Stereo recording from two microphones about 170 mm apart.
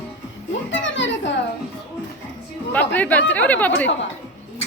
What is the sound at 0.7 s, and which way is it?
Children playing, 90° left.